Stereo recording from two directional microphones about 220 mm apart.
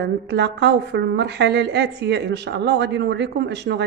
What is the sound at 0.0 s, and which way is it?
Speech, 50° right (ahead or behind).